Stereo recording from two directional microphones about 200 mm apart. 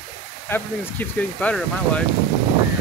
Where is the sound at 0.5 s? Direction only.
10° left (ahead or behind).